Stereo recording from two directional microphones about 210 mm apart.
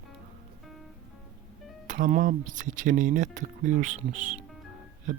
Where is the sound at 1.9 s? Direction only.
40° right (ahead or behind).